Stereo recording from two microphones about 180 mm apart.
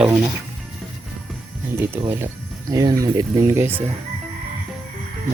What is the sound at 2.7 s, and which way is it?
Speech, 20° right (ahead or behind).